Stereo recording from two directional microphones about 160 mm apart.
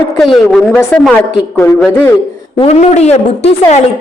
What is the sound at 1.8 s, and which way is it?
Speech, 5° left (ahead or behind).